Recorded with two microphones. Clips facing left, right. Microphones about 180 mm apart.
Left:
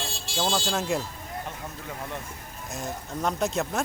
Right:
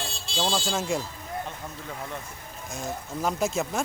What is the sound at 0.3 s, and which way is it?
Speech, centre (ahead or behind).